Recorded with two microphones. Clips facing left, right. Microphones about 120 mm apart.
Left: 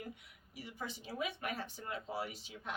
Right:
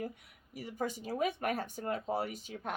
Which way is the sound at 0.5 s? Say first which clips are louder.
Right 8 dB; 45° right (ahead or behind).